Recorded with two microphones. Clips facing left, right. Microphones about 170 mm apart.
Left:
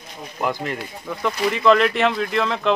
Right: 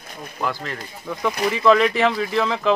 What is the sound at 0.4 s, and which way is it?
Speech, 15° left (ahead or behind).